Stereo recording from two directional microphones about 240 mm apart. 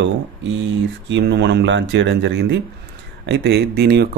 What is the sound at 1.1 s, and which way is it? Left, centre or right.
Speech, right.